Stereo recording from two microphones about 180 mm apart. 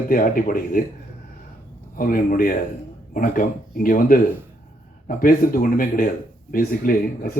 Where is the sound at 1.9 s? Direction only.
50° left (ahead or behind).